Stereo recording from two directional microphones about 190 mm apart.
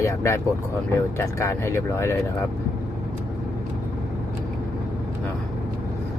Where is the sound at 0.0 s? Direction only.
15° left (ahead or behind).